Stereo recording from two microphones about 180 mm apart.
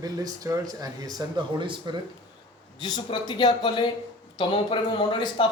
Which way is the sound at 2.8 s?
25° left (ahead or behind).